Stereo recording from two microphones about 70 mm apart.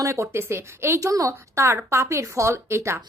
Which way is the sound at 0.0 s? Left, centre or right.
Right.